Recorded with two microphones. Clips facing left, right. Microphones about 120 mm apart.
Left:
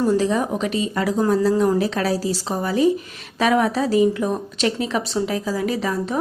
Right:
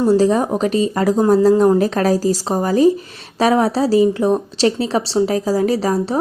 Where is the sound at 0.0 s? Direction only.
35° right (ahead or behind).